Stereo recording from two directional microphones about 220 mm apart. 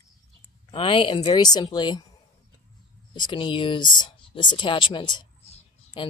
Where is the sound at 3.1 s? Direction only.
20° left (ahead or behind).